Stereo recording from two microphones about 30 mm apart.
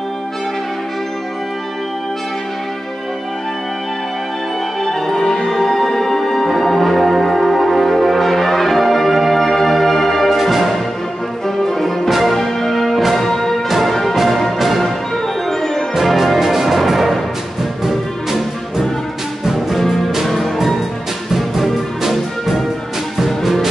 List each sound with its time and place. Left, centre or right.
5.0 s music: centre
5.5 s music: centre
10.3 s music: centre
12.1 s music: centre
12.4 s music: centre
14.1 s music: centre
15.9 s music: centre
21.3 s music: centre